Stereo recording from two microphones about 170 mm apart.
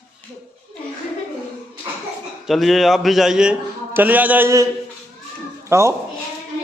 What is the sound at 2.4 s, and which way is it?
A man's voice, centre (ahead or behind).